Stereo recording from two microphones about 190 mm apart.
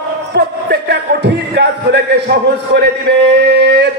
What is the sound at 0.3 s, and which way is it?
Music, 60° right (ahead or behind).